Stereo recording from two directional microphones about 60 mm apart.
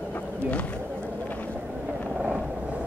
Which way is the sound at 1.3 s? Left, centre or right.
Left.